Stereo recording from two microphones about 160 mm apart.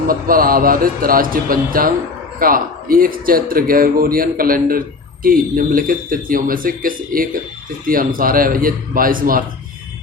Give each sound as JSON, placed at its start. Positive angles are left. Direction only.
{"t": 0.1, "sound": "speech", "side_deg": -60}